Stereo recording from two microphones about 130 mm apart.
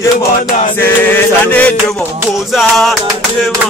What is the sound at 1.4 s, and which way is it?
Music, 10° left (ahead or behind).